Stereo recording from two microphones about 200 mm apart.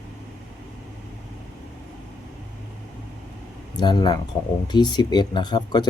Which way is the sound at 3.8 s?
20° left (ahead or behind).